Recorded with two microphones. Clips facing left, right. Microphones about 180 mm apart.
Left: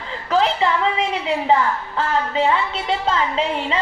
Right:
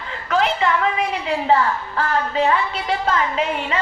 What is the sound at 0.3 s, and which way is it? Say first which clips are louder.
A woman's voice: left 1 dB; 30° left (ahead or behind).